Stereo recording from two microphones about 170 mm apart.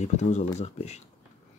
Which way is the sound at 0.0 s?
40° left (ahead or behind).